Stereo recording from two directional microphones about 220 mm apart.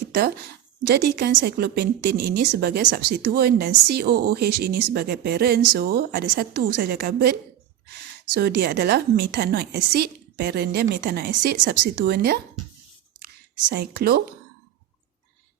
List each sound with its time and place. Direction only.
0.1 s a woman's voice: 45° right (ahead or behind)
8.4 s a woman's voice: 45° right (ahead or behind)
13.7 s a woman's voice: 45° right (ahead or behind)